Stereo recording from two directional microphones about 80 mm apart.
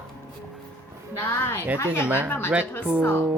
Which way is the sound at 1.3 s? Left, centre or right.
Left.